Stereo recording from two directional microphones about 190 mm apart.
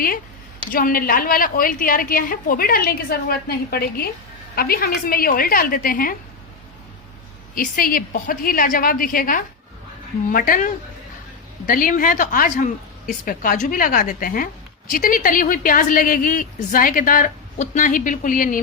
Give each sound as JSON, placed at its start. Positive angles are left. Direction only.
{"t": 0.7, "sound": "a woman's voice", "side_deg": 50}
{"t": 7.5, "sound": "a woman's voice", "side_deg": 50}